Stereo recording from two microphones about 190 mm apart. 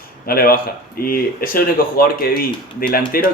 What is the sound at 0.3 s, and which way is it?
Speech, 50° left (ahead or behind).